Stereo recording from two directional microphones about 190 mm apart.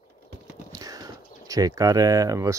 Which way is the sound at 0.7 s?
20° right (ahead or behind).